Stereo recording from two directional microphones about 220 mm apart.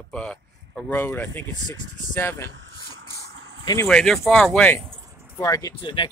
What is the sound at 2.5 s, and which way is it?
Vehicle, 55° right (ahead or behind).